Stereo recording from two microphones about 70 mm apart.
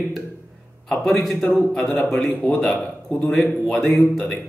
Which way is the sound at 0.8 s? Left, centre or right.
Centre.